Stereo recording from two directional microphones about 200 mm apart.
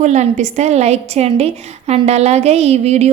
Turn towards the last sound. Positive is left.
turn(degrees=-35)  # may be behind; listen again after turning